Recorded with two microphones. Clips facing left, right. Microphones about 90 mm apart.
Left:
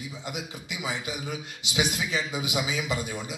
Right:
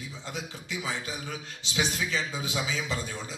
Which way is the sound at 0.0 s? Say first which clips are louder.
Left 2 dB; 15° left (ahead or behind).